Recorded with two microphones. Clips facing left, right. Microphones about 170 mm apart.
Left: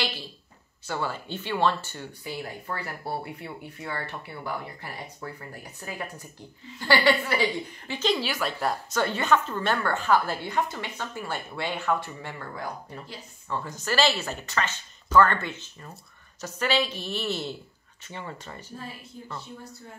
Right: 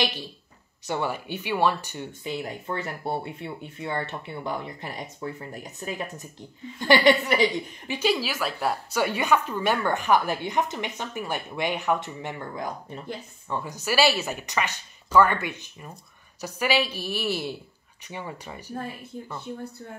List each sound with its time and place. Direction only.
0.8 s a woman's voice: 20° right (ahead or behind)